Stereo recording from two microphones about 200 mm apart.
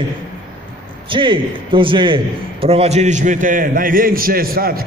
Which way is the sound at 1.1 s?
25° right (ahead or behind).